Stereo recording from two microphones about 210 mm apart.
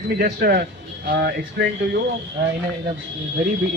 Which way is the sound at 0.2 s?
45° right (ahead or behind).